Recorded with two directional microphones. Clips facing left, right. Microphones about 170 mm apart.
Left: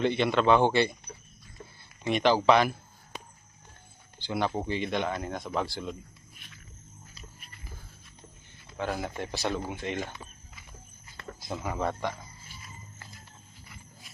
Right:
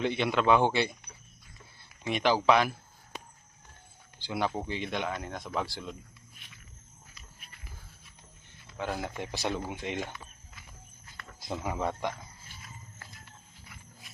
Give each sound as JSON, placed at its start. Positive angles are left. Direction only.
{"t": 0.0, "sound": "speech", "side_deg": -5}
{"t": 2.0, "sound": "speech", "side_deg": -5}
{"t": 4.2, "sound": "speech", "side_deg": -5}
{"t": 8.8, "sound": "speech", "side_deg": -5}
{"t": 11.6, "sound": "speech", "side_deg": -15}